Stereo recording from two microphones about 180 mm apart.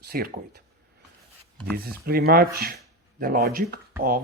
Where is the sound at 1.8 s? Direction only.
55° right (ahead or behind).